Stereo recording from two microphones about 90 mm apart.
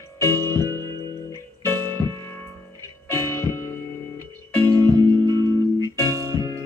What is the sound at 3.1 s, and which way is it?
Music, 40° right (ahead or behind).